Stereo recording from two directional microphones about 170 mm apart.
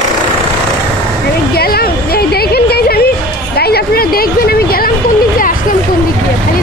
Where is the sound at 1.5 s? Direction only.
65° left (ahead or behind).